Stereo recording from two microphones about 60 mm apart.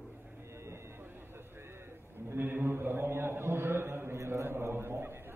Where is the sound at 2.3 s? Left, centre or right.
Right.